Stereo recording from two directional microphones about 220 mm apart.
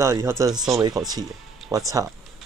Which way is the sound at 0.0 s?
15° right (ahead or behind).